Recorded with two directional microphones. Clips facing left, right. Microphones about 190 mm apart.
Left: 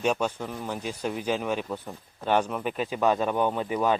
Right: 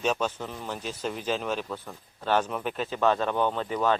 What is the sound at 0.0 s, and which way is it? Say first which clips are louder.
Speech: left 2 dB; 10° left (ahead or behind).